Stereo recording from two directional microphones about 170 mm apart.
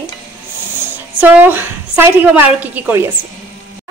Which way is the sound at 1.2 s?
10° right (ahead or behind).